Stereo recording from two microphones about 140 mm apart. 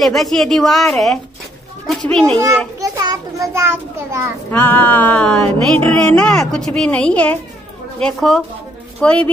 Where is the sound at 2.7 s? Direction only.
25° right (ahead or behind).